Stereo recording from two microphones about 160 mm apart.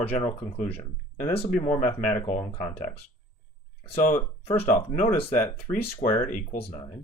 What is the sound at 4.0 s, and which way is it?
Speech, 45° left (ahead or behind).